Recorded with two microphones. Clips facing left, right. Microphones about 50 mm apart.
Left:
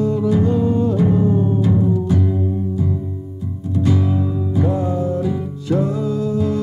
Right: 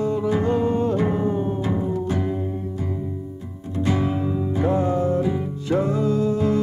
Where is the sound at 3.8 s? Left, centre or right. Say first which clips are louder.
Left 3 dB; right.